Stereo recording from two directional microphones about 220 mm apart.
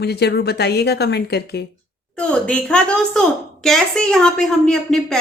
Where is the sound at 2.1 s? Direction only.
5° left (ahead or behind).